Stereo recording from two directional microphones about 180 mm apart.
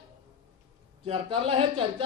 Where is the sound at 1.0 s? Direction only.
30° right (ahead or behind).